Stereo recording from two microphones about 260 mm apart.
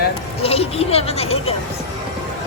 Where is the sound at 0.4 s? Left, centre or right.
Left.